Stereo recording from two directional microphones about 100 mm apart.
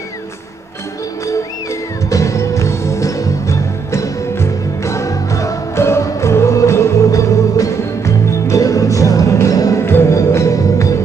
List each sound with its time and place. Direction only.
2.0 s music: 30° left (ahead or behind)